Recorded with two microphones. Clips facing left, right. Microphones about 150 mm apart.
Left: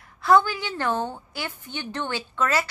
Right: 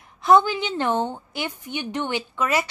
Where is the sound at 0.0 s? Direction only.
20° right (ahead or behind).